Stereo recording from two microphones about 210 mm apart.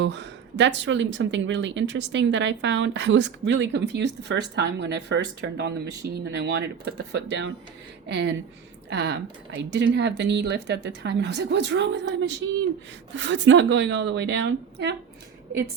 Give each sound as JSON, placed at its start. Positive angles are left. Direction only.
{"t": 0.0, "sound": "speech", "side_deg": -55}
{"t": 13.1, "sound": "speech", "side_deg": -60}